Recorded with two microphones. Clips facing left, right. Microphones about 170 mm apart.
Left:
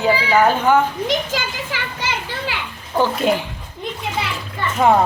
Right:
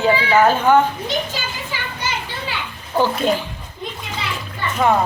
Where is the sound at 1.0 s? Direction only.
90° left.